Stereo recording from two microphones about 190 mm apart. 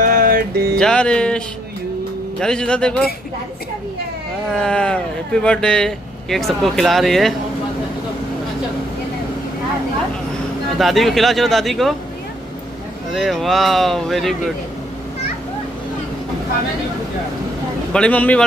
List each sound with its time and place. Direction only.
0.0 s music: 45° right (ahead or behind)
0.7 s speech: 5° left (ahead or behind)
4.6 s speech: 5° left (ahead or behind)
10.8 s speech: centre (ahead or behind)
13.1 s speech: centre (ahead or behind)
17.9 s speech: 5° left (ahead or behind)